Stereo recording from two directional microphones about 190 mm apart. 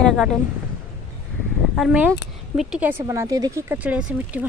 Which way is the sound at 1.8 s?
5° right (ahead or behind).